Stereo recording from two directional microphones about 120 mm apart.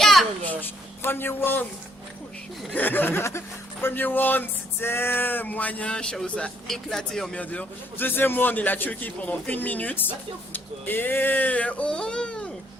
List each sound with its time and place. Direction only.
0.0 s a sound: centre (ahead or behind)
0.4 s speech: 15° left (ahead or behind)
2.7 s speech: 15° left (ahead or behind)